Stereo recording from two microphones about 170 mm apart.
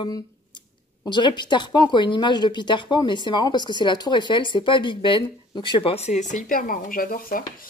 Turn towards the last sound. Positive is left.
turn(degrees=55)  # may be behind; listen again after turning